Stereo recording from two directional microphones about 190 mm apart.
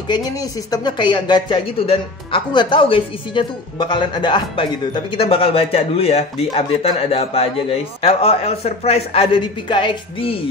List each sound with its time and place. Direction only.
0.1 s a man's voice: 20° left (ahead or behind)